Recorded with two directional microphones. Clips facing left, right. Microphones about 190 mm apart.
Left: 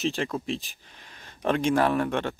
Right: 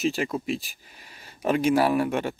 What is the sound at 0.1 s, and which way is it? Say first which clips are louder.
Speech: right 2 dB; 10° right (ahead or behind).